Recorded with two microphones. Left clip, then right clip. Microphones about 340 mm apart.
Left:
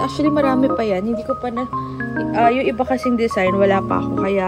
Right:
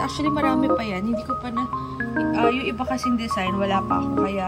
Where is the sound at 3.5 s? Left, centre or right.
Left.